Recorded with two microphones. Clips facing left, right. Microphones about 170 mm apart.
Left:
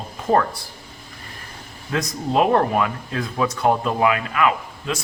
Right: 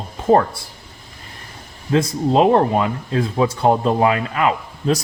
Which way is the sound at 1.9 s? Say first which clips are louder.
Right 5 dB; 25° right (ahead or behind).